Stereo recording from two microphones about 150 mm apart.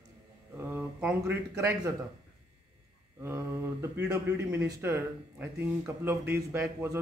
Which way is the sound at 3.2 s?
15° right (ahead or behind).